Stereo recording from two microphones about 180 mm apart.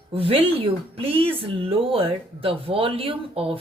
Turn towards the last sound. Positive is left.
turn(degrees=-30)  # may be behind; listen again after turning